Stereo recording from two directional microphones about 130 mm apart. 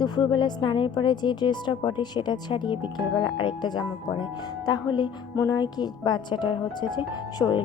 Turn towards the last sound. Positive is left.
turn(degrees=30)  # may be behind; listen again after turning